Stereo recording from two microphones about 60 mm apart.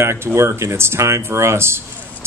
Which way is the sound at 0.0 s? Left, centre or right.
Right.